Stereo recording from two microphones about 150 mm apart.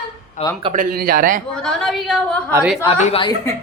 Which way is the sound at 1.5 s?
5° left (ahead or behind).